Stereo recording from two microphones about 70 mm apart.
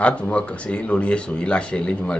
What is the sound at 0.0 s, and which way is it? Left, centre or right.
Speech, centre.